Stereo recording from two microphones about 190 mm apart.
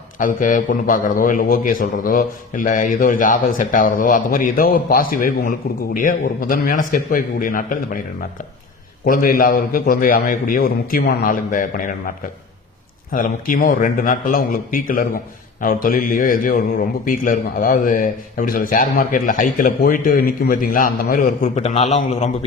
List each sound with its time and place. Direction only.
0.2 s a man's voice: 45° left (ahead or behind)
9.0 s a man's voice: 50° left (ahead or behind)